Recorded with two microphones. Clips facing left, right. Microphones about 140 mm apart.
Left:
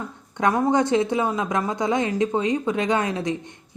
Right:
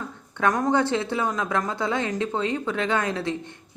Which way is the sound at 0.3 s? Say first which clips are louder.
Left 2 dB; 15° left (ahead or behind).